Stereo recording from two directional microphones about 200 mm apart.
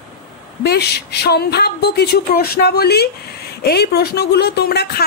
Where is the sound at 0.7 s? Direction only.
55° left (ahead or behind).